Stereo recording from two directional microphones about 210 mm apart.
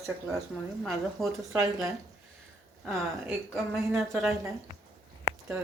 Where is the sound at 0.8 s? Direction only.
Centre (ahead or behind).